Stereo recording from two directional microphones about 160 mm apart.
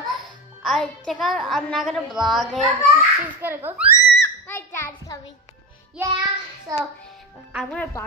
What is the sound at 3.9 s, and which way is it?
Screaming, 15° left (ahead or behind).